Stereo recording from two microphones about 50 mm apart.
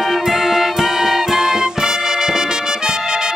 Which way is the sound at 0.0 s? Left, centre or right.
Centre.